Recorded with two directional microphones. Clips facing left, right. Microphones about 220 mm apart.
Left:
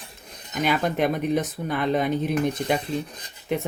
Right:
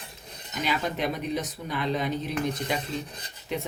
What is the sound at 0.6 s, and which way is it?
Speech, 50° left (ahead or behind).